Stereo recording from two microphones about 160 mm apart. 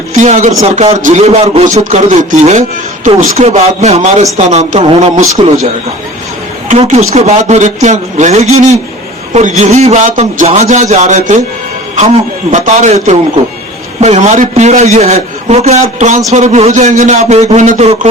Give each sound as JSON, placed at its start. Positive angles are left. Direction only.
{"t": 0.2, "sound": "a man's voice", "side_deg": -50}
{"t": 6.7, "sound": "a man's voice", "side_deg": -45}
{"t": 12.5, "sound": "a man's voice", "side_deg": -50}